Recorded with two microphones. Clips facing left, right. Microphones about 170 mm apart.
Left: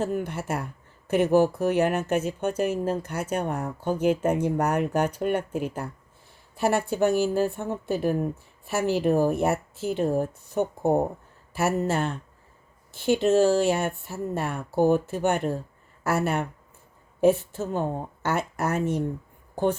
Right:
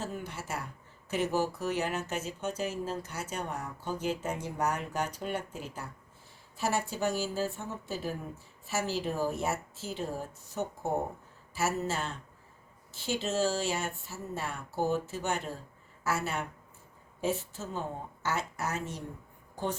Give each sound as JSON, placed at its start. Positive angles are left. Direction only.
{"t": 0.0, "sound": "speech", "side_deg": 55}